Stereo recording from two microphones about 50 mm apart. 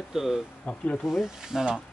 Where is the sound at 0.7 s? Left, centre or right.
Left.